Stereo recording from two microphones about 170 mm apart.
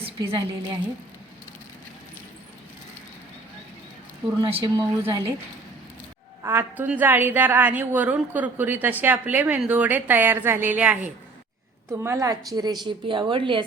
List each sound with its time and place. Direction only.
0.0 s a woman's voice: 30° right (ahead or behind)
4.4 s speech: 30° right (ahead or behind)
6.4 s a woman's voice: 10° right (ahead or behind); by 13.7 s 30° right (ahead or behind)